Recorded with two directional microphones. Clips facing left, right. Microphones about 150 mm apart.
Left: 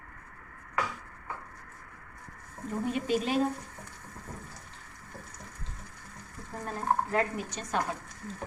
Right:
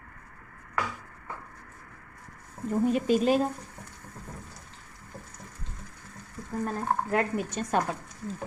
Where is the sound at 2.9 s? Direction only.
40° right (ahead or behind).